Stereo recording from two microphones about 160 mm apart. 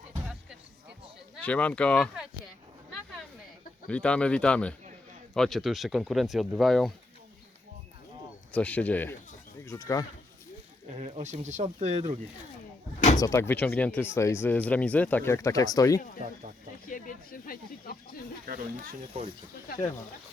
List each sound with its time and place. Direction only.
1.4 s speech: 10° left (ahead or behind)
3.8 s speech: 5° left (ahead or behind)
8.5 s speech: 10° left (ahead or behind)
9.6 s speech: 20° left (ahead or behind)
11.0 s speech: 45° right (ahead or behind)
13.1 s speech: 20° left (ahead or behind)
16.8 s speech: 60° left (ahead or behind)
18.4 s speech: 60° right (ahead or behind)
19.1 s speech: 45° right (ahead or behind)